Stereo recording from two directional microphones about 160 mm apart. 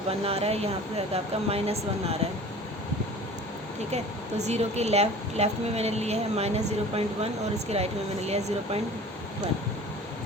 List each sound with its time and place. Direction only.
0.3 s a woman's voice: 40° right (ahead or behind)
4.4 s a woman's voice: 45° right (ahead or behind)